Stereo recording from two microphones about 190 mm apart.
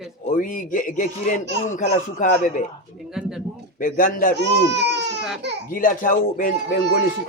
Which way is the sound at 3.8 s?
45° left (ahead or behind).